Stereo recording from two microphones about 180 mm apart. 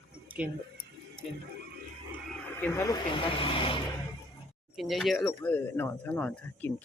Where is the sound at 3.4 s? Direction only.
30° left (ahead or behind).